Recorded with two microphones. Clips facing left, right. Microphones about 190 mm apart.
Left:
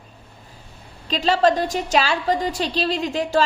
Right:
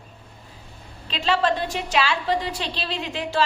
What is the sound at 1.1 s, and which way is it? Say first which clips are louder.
A woman's voice: left 4 dB; 40° left (ahead or behind).